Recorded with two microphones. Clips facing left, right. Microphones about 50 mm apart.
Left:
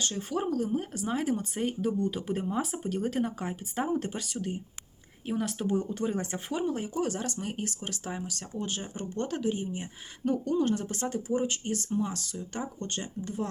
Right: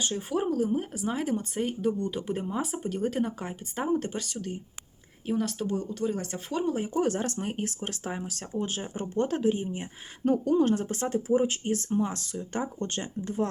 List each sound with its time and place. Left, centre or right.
0.0 s speech: centre
5.9 s speech: left
6.9 s speech: right
7.4 s speech: right
10.3 s speech: right
10.7 s speech: right